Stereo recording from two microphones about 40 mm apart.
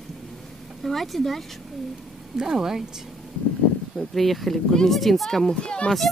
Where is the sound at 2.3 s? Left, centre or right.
Centre.